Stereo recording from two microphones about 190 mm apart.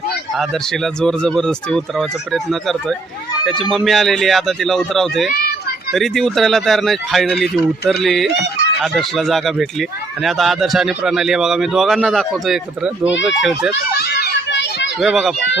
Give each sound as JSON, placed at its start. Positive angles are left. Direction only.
{"t": 0.3, "sound": "speech", "side_deg": 0}
{"t": 13.9, "sound": "children playing", "side_deg": 55}
{"t": 14.9, "sound": "speech", "side_deg": 0}